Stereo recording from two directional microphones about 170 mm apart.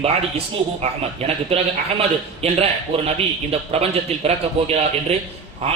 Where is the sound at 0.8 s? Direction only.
40° right (ahead or behind).